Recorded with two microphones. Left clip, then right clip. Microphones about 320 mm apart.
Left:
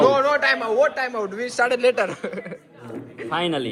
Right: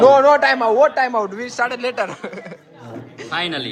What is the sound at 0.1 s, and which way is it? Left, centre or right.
Speech, centre.